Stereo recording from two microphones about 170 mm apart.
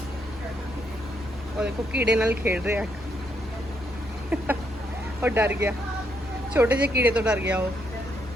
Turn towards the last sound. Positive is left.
turn(degrees=-10)  # may be behind; listen again after turning